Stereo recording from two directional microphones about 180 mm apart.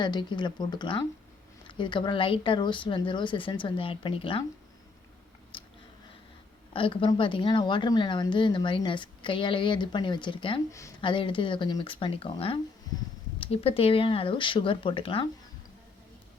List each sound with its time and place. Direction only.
0.0 s a woman's voice: 25° left (ahead or behind)
5.5 s a sound: 30° left (ahead or behind)
6.7 s a woman's voice: 30° left (ahead or behind)
10.7 s speech: 15° left (ahead or behind)
11.0 s a woman's voice: 30° left (ahead or behind)